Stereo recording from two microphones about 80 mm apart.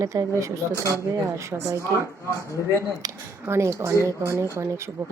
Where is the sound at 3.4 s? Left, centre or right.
Right.